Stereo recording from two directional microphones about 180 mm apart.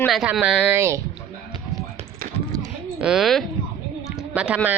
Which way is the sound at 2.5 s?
20° right (ahead or behind).